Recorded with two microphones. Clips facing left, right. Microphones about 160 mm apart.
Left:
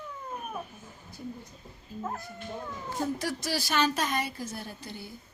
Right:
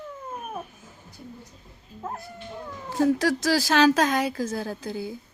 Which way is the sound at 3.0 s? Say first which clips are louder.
Right 10 dB; 85° right.